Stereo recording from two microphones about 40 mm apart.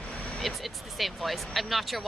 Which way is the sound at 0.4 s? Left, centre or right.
Centre.